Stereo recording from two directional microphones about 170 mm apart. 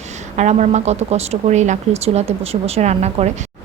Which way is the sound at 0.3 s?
45° right (ahead or behind).